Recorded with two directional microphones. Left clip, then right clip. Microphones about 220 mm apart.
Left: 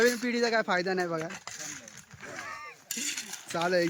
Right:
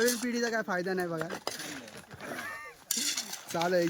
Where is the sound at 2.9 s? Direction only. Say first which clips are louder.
Right 2 dB; 25° right (ahead or behind).